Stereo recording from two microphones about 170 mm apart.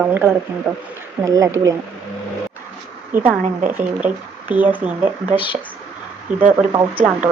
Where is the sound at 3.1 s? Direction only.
10° right (ahead or behind).